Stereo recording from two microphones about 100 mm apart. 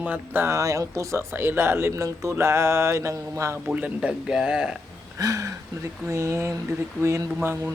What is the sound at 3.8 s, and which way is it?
Speech, 15° right (ahead or behind).